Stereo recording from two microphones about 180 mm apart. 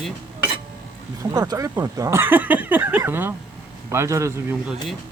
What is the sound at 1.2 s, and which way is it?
Speech, 20° right (ahead or behind).